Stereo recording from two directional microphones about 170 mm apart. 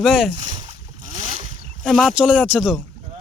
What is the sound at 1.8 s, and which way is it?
Speech, centre (ahead or behind).